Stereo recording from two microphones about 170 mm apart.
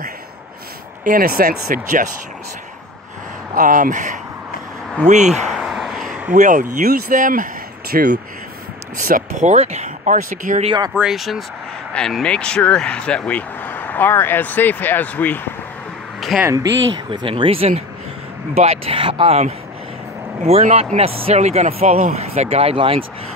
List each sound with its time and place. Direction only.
1.0 s speech: 55° right (ahead or behind)
3.5 s speech: 50° right (ahead or behind)
5.6 s a sound: centre (ahead or behind)
6.3 s speech: 50° right (ahead or behind)
10.6 s speech: 25° right (ahead or behind)
11.0 s speech: centre (ahead or behind)
17.1 s speech: 30° right (ahead or behind)